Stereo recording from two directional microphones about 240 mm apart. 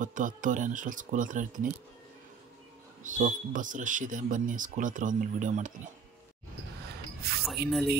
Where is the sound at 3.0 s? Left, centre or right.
Right.